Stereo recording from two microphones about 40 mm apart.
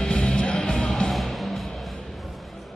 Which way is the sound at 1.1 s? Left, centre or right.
Centre.